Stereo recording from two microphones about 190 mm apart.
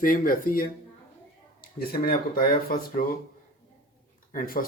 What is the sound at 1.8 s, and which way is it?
Speech, 50° left (ahead or behind).